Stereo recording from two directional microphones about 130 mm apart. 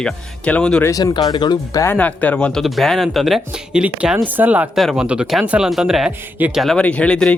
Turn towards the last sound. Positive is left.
turn(degrees=10)  # may be behind; listen again after turning